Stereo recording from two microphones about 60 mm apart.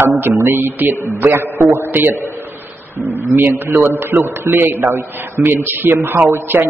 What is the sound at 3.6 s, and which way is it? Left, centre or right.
A man's voice, right.